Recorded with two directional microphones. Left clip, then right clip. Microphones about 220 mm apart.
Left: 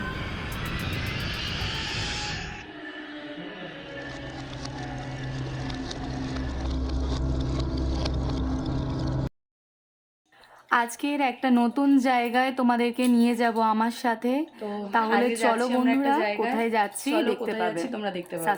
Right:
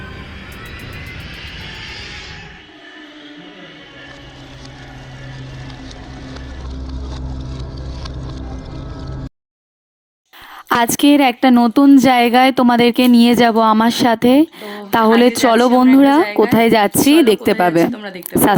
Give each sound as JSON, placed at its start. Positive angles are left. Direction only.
{"t": 10.7, "sound": "a woman's voice", "side_deg": -40}
{"t": 17.9, "sound": "speech", "side_deg": -5}